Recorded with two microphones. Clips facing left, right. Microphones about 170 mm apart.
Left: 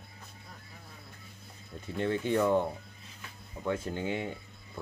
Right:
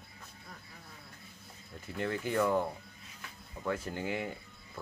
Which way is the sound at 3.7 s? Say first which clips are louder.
Left 3 dB; 25° left (ahead or behind).